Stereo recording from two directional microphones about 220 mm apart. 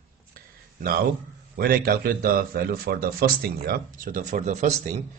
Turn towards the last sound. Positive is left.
turn(degrees=-30)  # may be behind; listen again after turning